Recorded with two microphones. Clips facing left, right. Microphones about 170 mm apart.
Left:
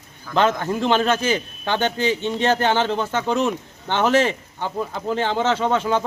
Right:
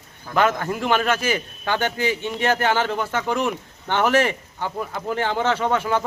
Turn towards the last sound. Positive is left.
turn(degrees=20)  # may be behind; listen again after turning